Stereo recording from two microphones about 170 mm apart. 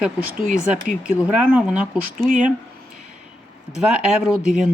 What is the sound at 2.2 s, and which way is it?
Speech, 50° right (ahead or behind).